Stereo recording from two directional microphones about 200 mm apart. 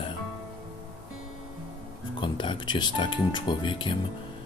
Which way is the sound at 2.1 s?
25° left (ahead or behind).